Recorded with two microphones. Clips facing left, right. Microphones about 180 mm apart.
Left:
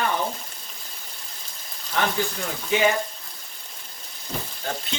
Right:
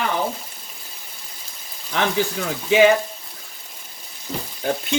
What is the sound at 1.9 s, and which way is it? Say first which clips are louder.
Speech: right 2 dB; 90° right.